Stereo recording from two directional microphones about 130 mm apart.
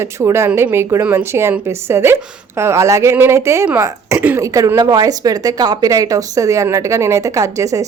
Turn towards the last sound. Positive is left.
turn(degrees=-25)  # may be behind; listen again after turning